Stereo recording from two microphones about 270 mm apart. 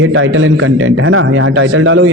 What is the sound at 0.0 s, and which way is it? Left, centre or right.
A man's voice, right.